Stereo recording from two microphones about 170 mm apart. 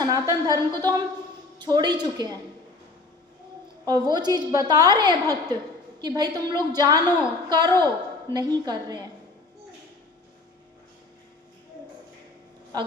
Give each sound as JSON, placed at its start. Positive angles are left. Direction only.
{"t": 0.0, "sound": "a woman's voice", "side_deg": -20}
{"t": 3.8, "sound": "a woman's voice", "side_deg": -25}
{"t": 12.7, "sound": "speech", "side_deg": -20}